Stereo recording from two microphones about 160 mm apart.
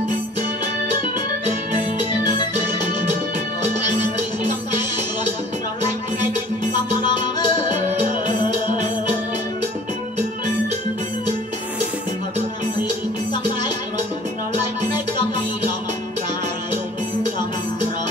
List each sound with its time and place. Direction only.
6.7 s music: 25° left (ahead or behind)